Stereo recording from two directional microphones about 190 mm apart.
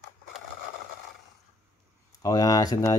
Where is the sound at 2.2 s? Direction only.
20° left (ahead or behind).